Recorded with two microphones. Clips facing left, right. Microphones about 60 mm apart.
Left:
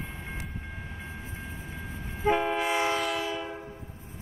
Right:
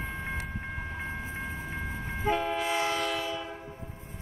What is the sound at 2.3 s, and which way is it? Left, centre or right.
Train, centre.